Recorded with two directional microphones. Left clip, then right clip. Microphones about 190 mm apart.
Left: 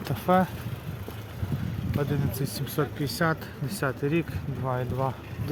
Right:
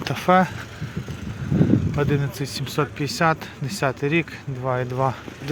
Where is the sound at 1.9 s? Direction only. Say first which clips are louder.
Right 7 dB; 40° right (ahead or behind).